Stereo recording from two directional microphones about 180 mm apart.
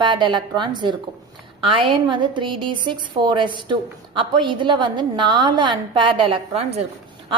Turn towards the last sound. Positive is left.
turn(degrees=-35)  # may be behind; listen again after turning